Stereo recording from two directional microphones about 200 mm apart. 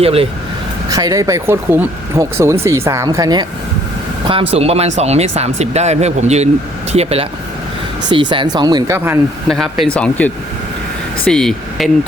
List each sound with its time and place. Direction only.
0.0 s speech: 30° right (ahead or behind)
0.9 s speech: 15° right (ahead or behind)
9.5 s speech: centre (ahead or behind)